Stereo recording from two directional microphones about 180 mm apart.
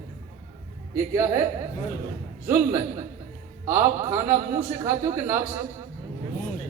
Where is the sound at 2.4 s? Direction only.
15° right (ahead or behind).